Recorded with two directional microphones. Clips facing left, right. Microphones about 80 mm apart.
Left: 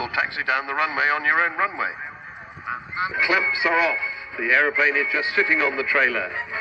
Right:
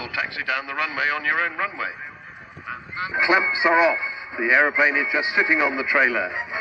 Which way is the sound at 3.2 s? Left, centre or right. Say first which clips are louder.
Right 3 dB; right.